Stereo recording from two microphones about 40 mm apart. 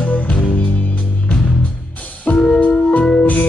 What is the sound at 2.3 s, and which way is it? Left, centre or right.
Music, left.